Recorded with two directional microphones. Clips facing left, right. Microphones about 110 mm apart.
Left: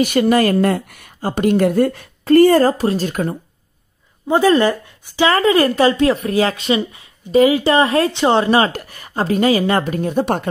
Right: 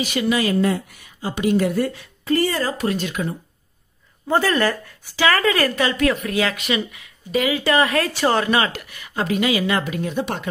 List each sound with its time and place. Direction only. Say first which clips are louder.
0.0 s speech: left 7 dB; 50° left (ahead or behind)
2.8 s speech: left 5 dB; 30° left (ahead or behind)
3.1 s speech: left 5 dB; 45° left (ahead or behind)
4.3 s speech: left 6 dB; 20° left (ahead or behind); by 10.5 s 45° left (ahead or behind)